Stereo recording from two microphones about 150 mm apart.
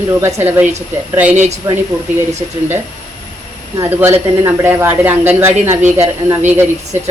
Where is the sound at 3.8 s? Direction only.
15° right (ahead or behind).